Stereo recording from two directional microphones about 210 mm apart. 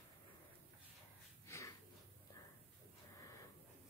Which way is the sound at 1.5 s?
15° left (ahead or behind).